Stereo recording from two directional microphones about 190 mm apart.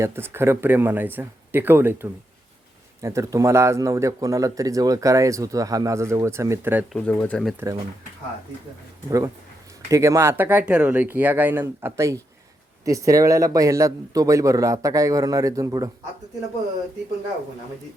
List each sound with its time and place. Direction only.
0.0 s speech: 15° right (ahead or behind)
6.9 s speech: 5° left (ahead or behind)
9.0 s speech: 15° right (ahead or behind)